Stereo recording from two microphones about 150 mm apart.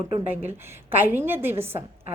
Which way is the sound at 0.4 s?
15° right (ahead or behind).